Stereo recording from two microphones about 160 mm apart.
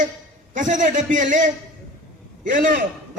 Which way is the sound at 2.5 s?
60° right (ahead or behind).